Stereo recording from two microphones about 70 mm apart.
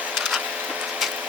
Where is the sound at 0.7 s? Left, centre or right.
Centre.